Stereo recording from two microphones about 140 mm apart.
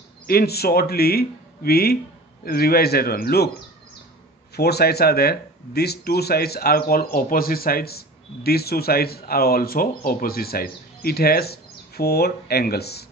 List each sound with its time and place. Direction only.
0.3 s speech: 90° left
5.0 s speech: 90° left